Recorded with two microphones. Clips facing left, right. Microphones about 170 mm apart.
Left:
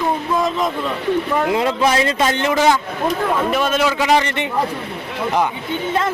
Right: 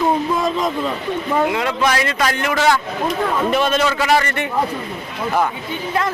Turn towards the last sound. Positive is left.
turn(degrees=15)  # may be behind; listen again after turning